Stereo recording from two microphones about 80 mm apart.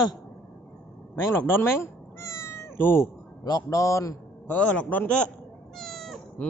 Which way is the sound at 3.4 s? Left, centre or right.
Left.